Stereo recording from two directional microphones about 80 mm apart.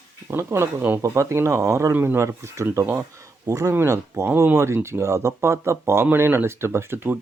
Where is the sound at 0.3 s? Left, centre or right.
Right.